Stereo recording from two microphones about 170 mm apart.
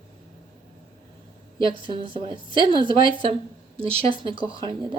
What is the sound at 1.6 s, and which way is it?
A woman's voice, 30° right (ahead or behind).